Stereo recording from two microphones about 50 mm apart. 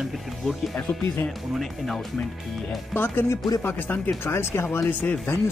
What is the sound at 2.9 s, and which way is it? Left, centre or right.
Speech, left.